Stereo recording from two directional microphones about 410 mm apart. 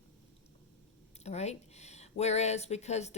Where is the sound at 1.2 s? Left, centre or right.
Centre.